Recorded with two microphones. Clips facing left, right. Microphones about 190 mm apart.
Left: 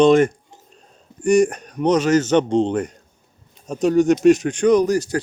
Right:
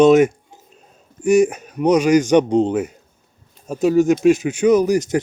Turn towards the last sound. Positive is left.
turn(degrees=-20)  # may be behind; listen again after turning